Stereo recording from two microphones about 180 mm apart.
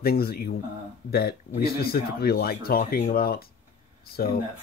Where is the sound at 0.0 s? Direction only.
60° left (ahead or behind).